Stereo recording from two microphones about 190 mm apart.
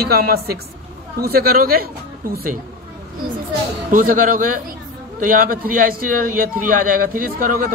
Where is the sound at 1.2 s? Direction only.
50° right (ahead or behind).